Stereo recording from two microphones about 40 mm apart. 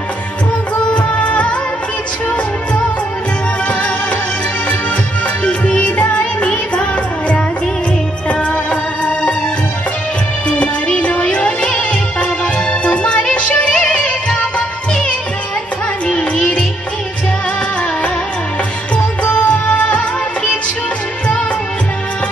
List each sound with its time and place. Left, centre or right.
0.9 s music: left
5.4 s music: left
10.5 s music: left
16.1 s music: left
19.2 s music: left